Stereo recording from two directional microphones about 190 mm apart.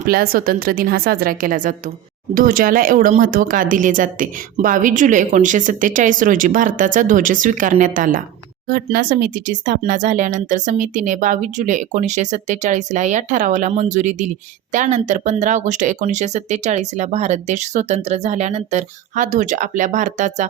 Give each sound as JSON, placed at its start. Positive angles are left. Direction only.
{"t": 0.0, "sound": "speech", "side_deg": -50}